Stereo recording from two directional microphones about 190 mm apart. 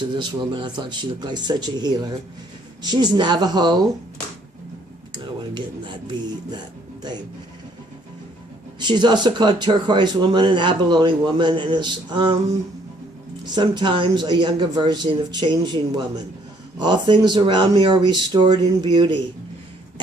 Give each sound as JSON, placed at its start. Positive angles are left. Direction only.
{"t": 0.0, "sound": "speech", "side_deg": -25}
{"t": 5.1, "sound": "speech", "side_deg": -25}
{"t": 8.8, "sound": "speech", "side_deg": -25}
{"t": 13.4, "sound": "speech", "side_deg": -25}
{"t": 16.8, "sound": "speech", "side_deg": -25}